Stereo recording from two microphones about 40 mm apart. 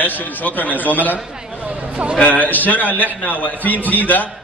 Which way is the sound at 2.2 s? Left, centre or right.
Left.